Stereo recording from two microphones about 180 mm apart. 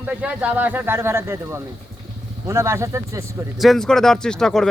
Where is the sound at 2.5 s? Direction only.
15° right (ahead or behind).